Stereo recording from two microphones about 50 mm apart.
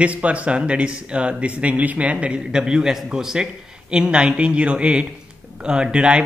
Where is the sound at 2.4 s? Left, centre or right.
Centre.